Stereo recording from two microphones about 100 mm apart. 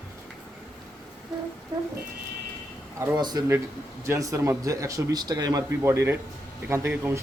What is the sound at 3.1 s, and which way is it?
Speech, 45° right (ahead or behind).